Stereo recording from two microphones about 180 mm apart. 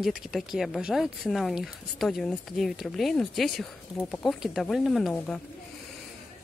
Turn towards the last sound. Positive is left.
turn(degrees=0)  # may be behind; listen again after turning